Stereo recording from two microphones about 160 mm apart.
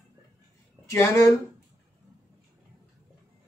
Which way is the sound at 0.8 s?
20° left (ahead or behind).